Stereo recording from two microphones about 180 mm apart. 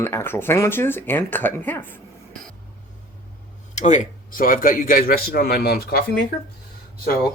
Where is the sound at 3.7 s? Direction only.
40° left (ahead or behind); by 6.2 s 55° left (ahead or behind).